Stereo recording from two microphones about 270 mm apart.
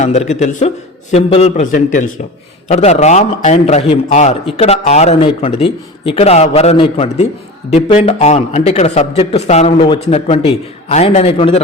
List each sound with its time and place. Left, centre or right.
0.0 s a man's voice: left